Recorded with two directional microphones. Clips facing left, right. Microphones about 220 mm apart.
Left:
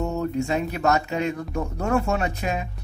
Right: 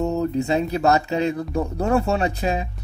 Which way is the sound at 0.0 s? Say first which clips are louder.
Right 3 dB; 35° right (ahead or behind).